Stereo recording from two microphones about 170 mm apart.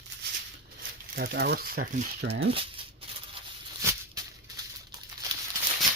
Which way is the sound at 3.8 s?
15° right (ahead or behind).